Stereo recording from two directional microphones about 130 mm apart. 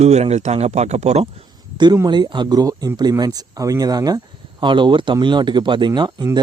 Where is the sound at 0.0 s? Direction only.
55° right (ahead or behind).